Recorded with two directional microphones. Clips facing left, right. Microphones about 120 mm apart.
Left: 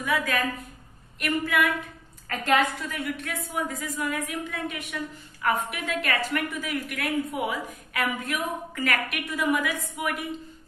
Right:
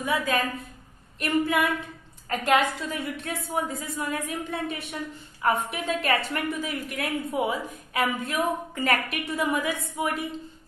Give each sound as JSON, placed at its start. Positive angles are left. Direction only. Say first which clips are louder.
{"t": 0.0, "sound": "a woman's voice", "louder": "right 1 dB", "side_deg": -25}